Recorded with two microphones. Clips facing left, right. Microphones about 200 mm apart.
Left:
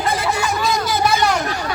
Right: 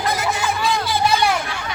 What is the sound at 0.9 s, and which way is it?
Chatter, 45° left (ahead or behind).